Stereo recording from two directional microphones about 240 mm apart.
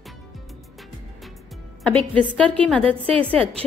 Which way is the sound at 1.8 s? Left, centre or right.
Centre.